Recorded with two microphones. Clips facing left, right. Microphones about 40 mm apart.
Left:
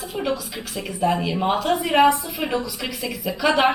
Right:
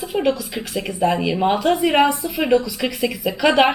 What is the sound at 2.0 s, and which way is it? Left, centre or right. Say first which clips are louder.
Speech: left 2 dB; centre.